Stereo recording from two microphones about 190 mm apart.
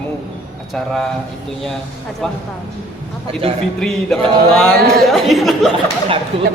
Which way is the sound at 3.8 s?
5° left (ahead or behind).